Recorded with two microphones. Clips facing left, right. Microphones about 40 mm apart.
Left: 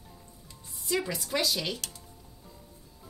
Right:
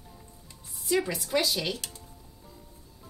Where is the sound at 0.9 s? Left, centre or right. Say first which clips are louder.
Right 3 dB; centre.